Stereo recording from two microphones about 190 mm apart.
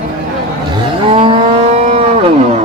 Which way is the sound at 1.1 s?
30° right (ahead or behind).